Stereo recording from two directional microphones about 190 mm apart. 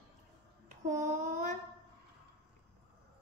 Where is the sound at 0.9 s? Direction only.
40° right (ahead or behind).